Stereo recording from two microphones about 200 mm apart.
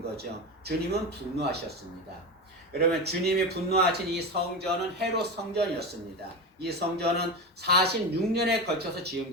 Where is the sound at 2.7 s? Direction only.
55° right (ahead or behind).